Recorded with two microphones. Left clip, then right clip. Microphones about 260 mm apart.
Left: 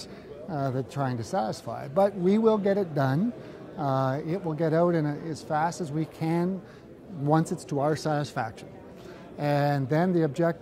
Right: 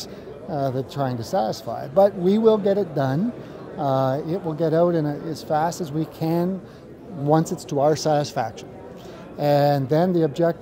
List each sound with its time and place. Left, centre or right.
0.5 s speech: left